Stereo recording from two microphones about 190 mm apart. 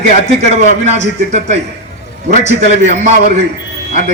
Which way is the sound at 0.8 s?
35° right (ahead or behind).